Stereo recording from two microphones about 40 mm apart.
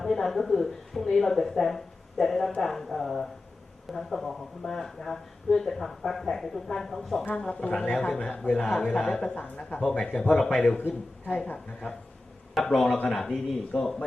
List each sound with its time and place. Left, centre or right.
0.0 s speech: centre
7.7 s a man's voice: left
10.8 s speech: left
12.5 s speech: centre